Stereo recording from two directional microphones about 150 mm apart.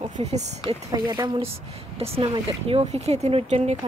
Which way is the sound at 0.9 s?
25° right (ahead or behind).